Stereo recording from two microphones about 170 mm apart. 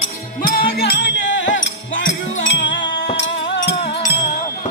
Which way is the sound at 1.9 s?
75° left (ahead or behind).